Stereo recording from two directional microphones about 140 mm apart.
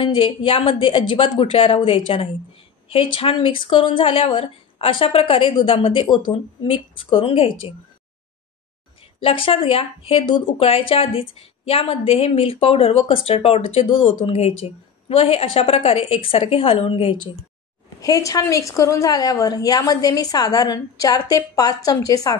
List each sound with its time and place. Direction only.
0.0 s speech: 40° left (ahead or behind)
9.2 s speech: 40° left (ahead or behind)
18.0 s a woman's voice: 25° left (ahead or behind)